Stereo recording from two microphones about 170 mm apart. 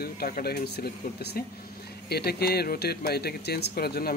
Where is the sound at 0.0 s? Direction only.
65° left (ahead or behind).